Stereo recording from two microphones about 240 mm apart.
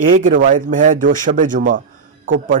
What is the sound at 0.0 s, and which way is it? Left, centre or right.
Speech, right.